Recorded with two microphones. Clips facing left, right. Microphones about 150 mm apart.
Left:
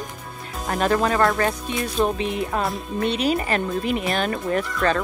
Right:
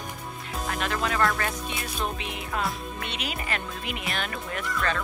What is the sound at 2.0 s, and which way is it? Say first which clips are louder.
Music: left 12 dB; 45° left (ahead or behind).